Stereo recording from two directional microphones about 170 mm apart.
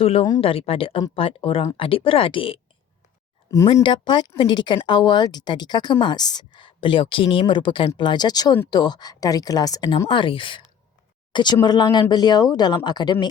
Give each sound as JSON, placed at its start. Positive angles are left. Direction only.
{"t": 0.0, "sound": "speech", "side_deg": 35}
{"t": 3.8, "sound": "speech", "side_deg": 25}